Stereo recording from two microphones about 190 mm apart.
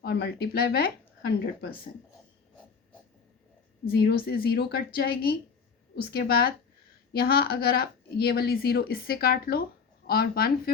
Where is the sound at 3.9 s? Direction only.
55° left (ahead or behind).